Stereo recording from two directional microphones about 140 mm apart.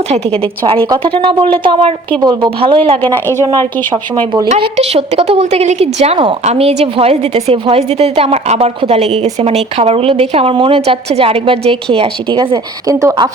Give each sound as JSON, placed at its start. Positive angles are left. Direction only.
{"t": 0.1, "sound": "a woman's voice", "side_deg": -45}
{"t": 4.4, "sound": "a woman's voice", "side_deg": -50}